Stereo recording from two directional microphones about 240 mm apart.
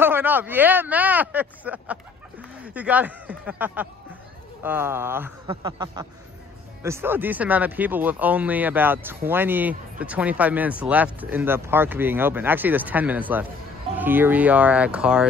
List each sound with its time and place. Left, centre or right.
0.0 s speech: centre